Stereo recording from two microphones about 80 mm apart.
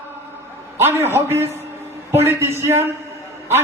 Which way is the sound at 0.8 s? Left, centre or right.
Right.